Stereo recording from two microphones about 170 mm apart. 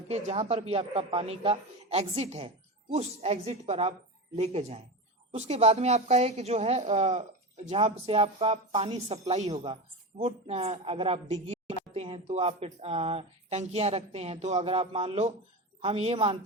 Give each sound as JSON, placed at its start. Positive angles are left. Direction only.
{"t": 0.1, "sound": "a woman's voice", "side_deg": -40}